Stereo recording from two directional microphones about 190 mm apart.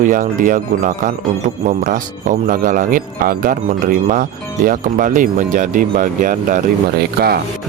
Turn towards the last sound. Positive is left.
turn(degrees=-55)  # may be behind; listen again after turning